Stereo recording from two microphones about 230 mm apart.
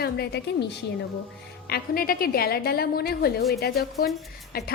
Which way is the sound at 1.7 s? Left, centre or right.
Left.